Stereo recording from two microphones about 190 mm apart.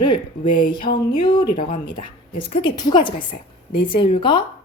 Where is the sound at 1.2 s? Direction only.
20° left (ahead or behind).